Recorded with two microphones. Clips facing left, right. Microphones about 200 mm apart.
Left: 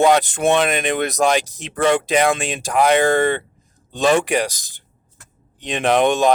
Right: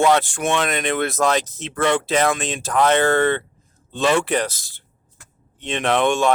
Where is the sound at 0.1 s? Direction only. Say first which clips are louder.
Left 3 dB; 20° left (ahead or behind).